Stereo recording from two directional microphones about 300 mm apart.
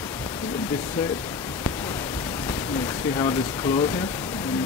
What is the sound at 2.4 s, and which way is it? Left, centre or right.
Speech, centre.